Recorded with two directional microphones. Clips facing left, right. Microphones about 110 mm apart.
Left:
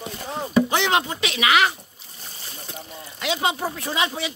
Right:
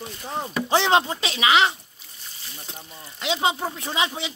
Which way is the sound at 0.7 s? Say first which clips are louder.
Right 2 dB; 30° right (ahead or behind).